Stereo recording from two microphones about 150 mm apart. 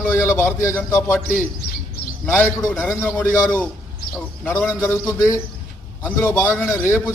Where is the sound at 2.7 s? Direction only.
10° left (ahead or behind).